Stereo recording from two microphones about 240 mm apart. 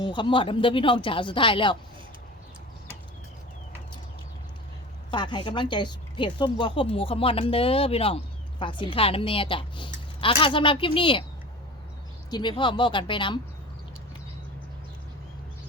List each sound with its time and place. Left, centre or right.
0.0 s a woman's voice: centre
5.1 s a woman's voice: centre
12.3 s a woman's voice: centre